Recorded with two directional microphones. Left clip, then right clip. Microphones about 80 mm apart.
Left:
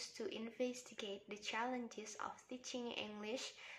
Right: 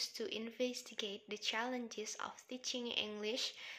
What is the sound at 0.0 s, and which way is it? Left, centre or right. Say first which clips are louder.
A woman's voice: right 5 dB; centre.